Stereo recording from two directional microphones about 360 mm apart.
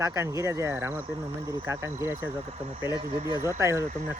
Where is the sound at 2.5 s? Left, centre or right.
Centre.